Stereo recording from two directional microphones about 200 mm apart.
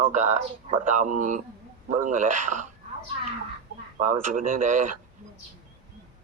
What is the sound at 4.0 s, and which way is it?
Speech, 40° right (ahead or behind).